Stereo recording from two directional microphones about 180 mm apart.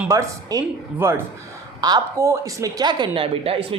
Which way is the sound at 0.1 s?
15° right (ahead or behind).